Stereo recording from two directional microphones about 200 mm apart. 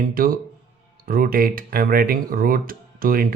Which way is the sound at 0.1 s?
45° right (ahead or behind).